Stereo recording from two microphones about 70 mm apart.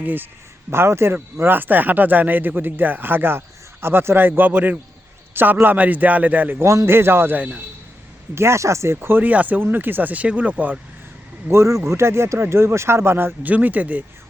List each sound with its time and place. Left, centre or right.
0.0 s speech: right
0.7 s speech: right
7.3 s speech: right
8.4 s speech: right
11.4 s speech: right